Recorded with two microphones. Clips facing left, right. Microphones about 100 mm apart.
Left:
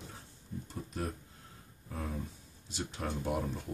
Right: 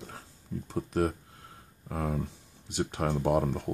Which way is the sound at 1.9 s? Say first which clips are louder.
Right 8 dB; 65° right (ahead or behind).